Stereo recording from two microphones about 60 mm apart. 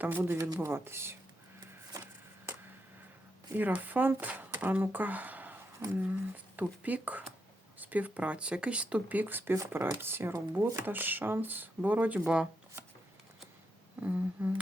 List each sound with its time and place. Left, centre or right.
0.0 s speech: right
3.7 s speech: right
12.2 s speech: centre
14.0 s speech: right